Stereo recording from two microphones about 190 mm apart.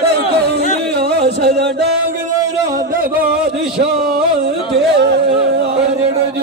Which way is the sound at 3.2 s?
55° right (ahead or behind).